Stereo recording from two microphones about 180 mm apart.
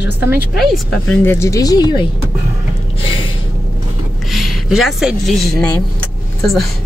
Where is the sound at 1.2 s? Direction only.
15° left (ahead or behind).